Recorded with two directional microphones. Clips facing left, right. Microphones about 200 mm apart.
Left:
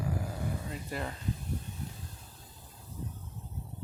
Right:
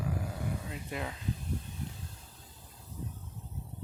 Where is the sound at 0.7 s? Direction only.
Centre (ahead or behind).